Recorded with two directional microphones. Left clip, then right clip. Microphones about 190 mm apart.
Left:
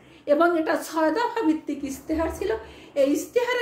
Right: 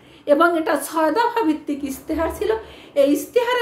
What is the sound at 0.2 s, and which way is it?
A woman's voice, 15° right (ahead or behind).